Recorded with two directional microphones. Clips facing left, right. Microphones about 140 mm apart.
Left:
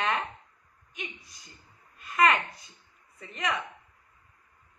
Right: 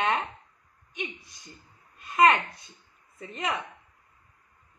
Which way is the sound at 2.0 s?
25° right (ahead or behind).